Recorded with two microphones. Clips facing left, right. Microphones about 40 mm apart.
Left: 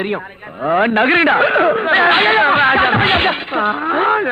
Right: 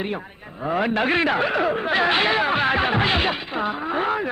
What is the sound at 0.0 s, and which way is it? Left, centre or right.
A man's voice, left.